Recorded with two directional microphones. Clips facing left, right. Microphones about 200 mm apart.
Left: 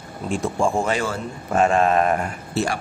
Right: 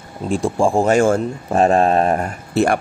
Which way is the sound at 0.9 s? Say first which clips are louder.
Right 11 dB; 50° right (ahead or behind).